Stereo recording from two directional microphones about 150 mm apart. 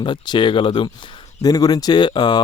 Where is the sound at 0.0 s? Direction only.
30° left (ahead or behind).